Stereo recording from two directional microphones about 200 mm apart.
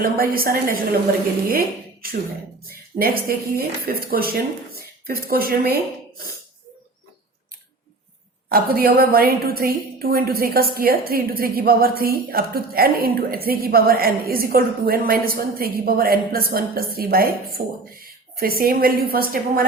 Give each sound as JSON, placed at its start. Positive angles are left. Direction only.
{"t": 0.0, "sound": "a woman's voice", "side_deg": -45}
{"t": 8.4, "sound": "a woman's voice", "side_deg": -50}